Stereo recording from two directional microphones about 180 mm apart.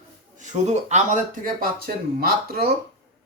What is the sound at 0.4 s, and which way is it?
Speech, 40° right (ahead or behind).